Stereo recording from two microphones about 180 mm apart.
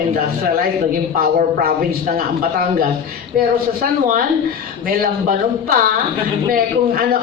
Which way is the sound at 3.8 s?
50° right (ahead or behind).